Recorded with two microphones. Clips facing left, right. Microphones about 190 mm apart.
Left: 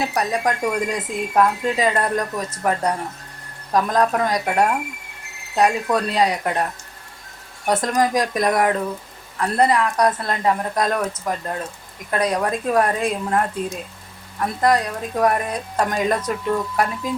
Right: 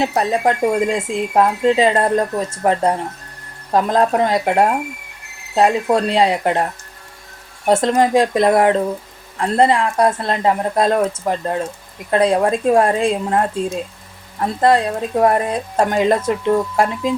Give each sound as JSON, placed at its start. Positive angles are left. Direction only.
{"t": 0.0, "sound": "speech", "side_deg": -25}
{"t": 7.7, "sound": "speech", "side_deg": -25}